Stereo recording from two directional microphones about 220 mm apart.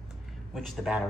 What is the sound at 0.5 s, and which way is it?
Speech, centre (ahead or behind).